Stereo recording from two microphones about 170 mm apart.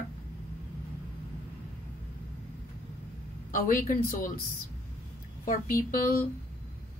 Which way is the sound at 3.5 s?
50° left (ahead or behind).